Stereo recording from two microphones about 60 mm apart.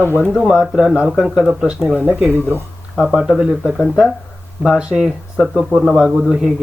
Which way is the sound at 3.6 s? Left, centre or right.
Centre.